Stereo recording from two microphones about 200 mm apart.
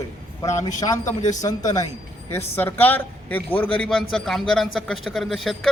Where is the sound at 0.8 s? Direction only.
15° left (ahead or behind).